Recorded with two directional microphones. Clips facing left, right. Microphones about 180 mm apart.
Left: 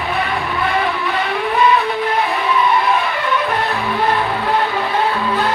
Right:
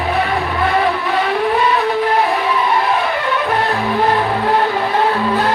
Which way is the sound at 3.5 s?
40° right (ahead or behind).